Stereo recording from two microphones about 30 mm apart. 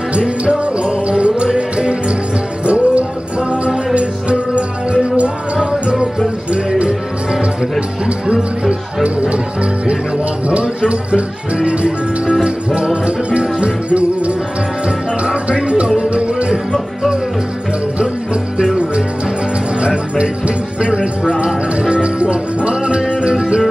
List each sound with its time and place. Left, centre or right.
0.2 s music: right
1.0 s music: right
5.6 s music: right
8.3 s speech: right
9.3 s speech: right
12.9 s music: right
15.4 s music: right
17.9 s music: right
20.2 s music: right